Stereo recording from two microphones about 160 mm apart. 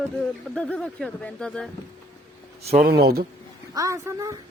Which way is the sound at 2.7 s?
75° right (ahead or behind).